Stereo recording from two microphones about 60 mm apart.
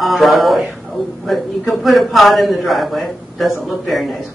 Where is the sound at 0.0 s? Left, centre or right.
Centre.